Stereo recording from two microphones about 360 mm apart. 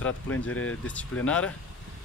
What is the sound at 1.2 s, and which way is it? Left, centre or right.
Speech, centre.